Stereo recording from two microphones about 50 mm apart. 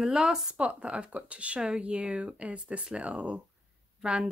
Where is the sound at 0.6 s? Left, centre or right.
Right.